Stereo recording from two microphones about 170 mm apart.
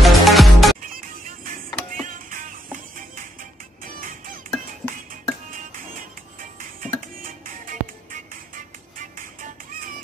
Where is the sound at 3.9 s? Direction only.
55° right (ahead or behind).